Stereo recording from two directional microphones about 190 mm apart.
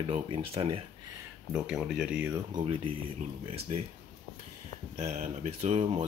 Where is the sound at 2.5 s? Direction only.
30° right (ahead or behind).